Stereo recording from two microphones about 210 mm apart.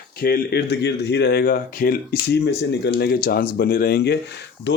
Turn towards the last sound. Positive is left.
turn(degrees=55)  # may be behind; listen again after turning